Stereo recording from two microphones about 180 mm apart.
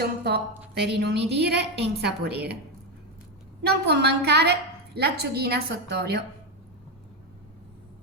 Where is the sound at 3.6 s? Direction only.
65° right (ahead or behind).